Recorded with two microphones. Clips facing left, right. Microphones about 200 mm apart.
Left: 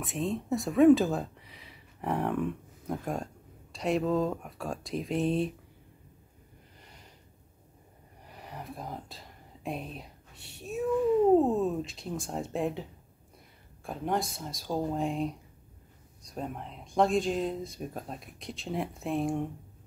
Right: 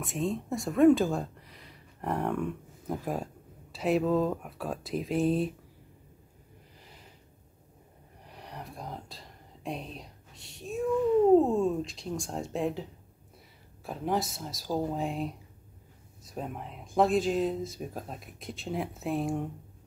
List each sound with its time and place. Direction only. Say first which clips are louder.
0.0 s speech: right 1 dB; centre (ahead or behind)
6.8 s a sound: even; centre (ahead or behind)
8.3 s whispering: left 1 dB; centre (ahead or behind)
10.3 s a sound: even; 65° left (ahead or behind)
11.3 s speech: right 2 dB; 5° left (ahead or behind)
13.8 s speech: right 1 dB; centre (ahead or behind)